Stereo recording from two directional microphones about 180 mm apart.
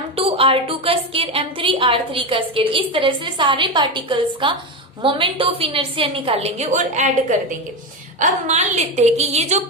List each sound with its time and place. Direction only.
0.2 s a woman's voice: 30° right (ahead or behind)